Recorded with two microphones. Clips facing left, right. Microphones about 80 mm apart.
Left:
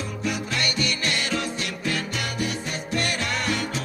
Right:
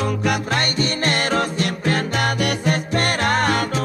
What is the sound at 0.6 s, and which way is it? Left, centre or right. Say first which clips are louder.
Music: right 5 dB; right.